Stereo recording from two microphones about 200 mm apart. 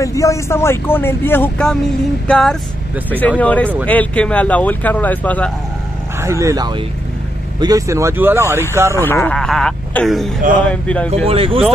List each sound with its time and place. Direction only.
0.0 s speech: 15° left (ahead or behind)
6.2 s speech: 15° right (ahead or behind)
8.9 s speech: 10° left (ahead or behind)
11.2 s speech: 30° right (ahead or behind)